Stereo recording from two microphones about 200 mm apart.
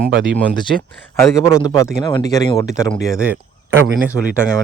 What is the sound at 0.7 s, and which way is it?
Speech, 50° right (ahead or behind).